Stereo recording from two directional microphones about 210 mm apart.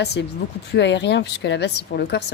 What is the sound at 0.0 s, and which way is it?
A woman's voice, 50° left (ahead or behind).